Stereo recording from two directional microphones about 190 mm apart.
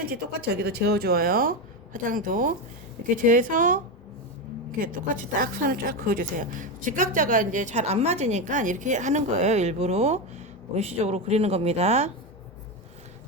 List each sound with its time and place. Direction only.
0.0 s speech: 55° right (ahead or behind)
4.8 s speech: 45° right (ahead or behind)